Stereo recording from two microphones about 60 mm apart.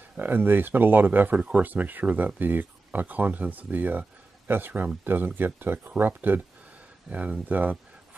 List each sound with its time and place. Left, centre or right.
0.2 s speech: right